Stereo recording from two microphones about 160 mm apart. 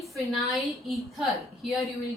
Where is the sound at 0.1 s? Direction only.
Centre (ahead or behind).